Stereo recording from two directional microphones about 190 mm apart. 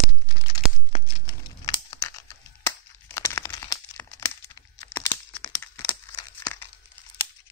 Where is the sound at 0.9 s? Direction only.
25° left (ahead or behind).